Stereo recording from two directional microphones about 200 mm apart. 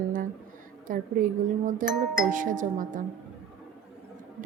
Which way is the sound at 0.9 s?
40° right (ahead or behind).